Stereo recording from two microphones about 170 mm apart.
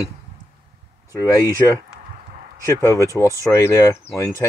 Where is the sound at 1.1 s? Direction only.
20° left (ahead or behind).